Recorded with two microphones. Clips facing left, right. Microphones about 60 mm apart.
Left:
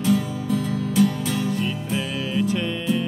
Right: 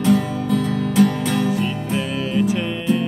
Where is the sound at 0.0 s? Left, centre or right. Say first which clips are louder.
Right 4 dB; right.